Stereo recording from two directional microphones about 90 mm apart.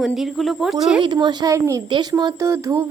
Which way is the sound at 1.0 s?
55° right (ahead or behind).